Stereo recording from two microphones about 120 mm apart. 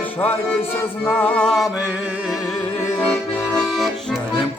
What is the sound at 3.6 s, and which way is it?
Accordion, centre (ahead or behind).